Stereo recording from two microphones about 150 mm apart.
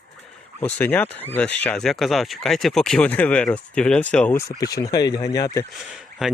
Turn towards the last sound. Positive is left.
turn(degrees=0)  # may be behind; listen again after turning